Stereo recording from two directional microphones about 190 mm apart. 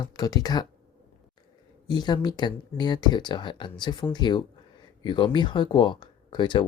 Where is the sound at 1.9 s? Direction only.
25° left (ahead or behind).